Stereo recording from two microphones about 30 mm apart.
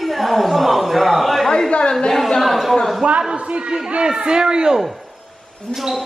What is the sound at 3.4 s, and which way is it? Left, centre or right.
Chatter, right.